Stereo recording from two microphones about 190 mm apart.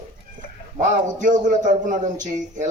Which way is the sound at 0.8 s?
40° right (ahead or behind).